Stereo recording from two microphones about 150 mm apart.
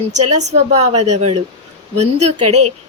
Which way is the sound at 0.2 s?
50° right (ahead or behind).